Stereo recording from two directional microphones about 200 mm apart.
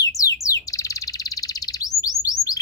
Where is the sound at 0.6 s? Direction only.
15° left (ahead or behind).